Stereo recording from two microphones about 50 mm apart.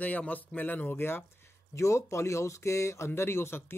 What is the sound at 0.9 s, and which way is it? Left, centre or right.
Speech, left.